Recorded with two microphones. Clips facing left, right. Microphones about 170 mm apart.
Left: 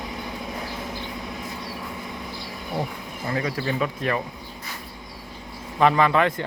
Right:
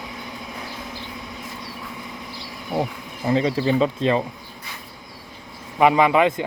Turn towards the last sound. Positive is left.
turn(degrees=-15)  # may be behind; listen again after turning